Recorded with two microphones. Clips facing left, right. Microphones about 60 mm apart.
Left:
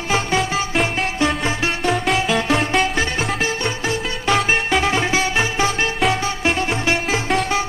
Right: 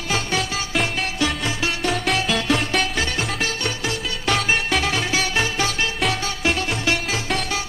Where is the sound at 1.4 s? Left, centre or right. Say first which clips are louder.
Left 3 dB; left.